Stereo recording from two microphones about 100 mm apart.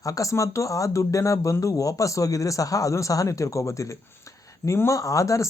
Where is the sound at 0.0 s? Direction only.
35° left (ahead or behind).